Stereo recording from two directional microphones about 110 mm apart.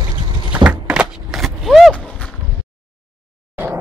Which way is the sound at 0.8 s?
10° right (ahead or behind).